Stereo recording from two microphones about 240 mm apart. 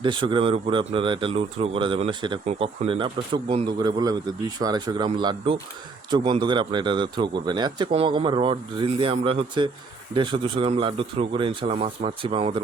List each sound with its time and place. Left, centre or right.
0.0 s speech: centre